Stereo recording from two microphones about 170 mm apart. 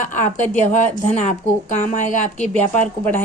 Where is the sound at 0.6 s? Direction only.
45° left (ahead or behind).